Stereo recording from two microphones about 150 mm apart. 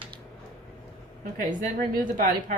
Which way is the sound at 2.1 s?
65° right (ahead or behind).